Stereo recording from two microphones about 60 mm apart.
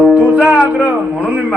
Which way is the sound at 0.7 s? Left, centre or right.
Right.